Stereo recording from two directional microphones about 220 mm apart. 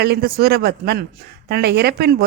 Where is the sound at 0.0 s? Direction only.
45° right (ahead or behind).